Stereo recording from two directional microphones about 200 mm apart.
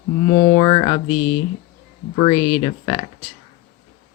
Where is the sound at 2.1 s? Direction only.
30° left (ahead or behind).